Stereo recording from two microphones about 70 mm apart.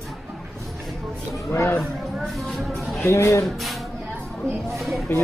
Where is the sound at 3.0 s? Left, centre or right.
Left.